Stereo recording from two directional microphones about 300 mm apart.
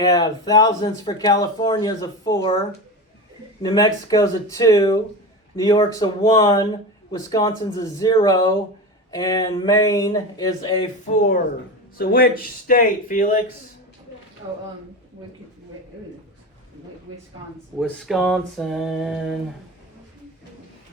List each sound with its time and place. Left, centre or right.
0.0 s speech: centre
3.6 s speech: centre
11.1 s speech: left
17.7 s a sound: centre